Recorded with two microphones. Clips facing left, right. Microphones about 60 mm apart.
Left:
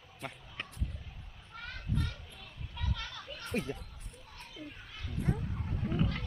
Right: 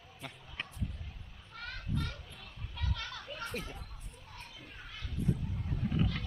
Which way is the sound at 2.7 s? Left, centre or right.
Centre.